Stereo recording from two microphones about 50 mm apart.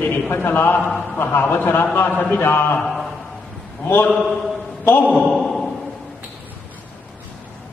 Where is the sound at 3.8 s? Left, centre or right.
Left.